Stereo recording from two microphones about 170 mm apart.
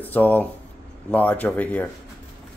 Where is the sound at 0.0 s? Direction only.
10° left (ahead or behind).